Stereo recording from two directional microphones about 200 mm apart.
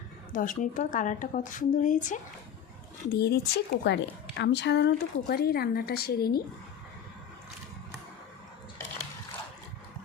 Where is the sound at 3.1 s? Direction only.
50° left (ahead or behind).